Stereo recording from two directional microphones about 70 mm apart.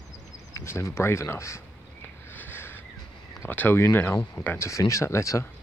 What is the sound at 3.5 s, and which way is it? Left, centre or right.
Speech, left.